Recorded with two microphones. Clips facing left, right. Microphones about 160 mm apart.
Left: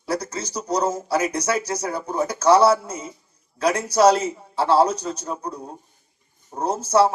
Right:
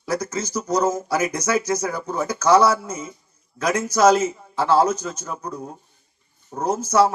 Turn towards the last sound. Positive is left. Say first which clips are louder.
# even
turn(degrees=30)  # may be behind; listen again after turning